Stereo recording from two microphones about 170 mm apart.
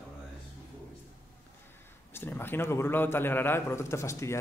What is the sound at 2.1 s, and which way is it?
A man's voice, 10° left (ahead or behind).